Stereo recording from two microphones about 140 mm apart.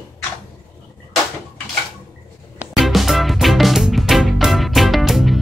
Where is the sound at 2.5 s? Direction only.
Centre (ahead or behind).